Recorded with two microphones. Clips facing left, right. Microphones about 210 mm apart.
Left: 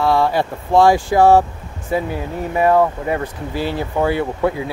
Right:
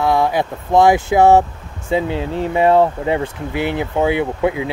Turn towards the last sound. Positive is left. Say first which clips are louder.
# right 1 dB
turn(degrees=-15)  # may be behind; listen again after turning